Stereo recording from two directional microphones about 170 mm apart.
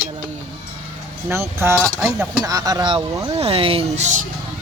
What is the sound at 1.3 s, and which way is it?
Speech, 15° right (ahead or behind).